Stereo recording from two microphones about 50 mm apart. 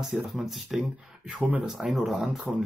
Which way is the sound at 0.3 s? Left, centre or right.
Centre.